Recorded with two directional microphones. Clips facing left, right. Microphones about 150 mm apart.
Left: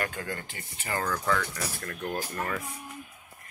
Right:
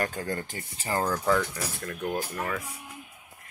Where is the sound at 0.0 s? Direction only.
40° right (ahead or behind).